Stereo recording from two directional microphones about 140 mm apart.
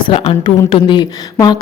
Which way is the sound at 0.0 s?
40° left (ahead or behind).